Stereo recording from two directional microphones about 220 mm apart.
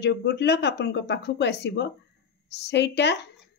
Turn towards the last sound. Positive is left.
turn(degrees=50)  # may be behind; listen again after turning